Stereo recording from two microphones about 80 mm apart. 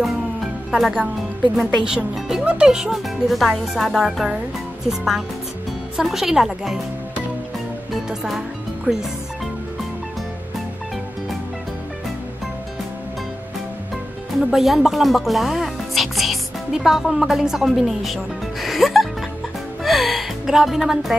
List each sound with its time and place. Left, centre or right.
0.0 s music: centre
1.6 s speech: centre
7.9 s music: centre
8.9 s speech: centre
14.4 s speech: centre
19.8 s music: centre